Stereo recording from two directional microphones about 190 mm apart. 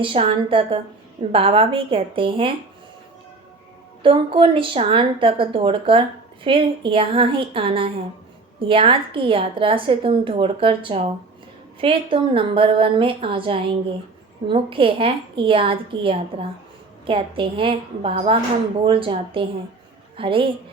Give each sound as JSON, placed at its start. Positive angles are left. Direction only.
{"t": 0.0, "sound": "a woman's voice", "side_deg": -30}
{"t": 4.0, "sound": "a woman's voice", "side_deg": -25}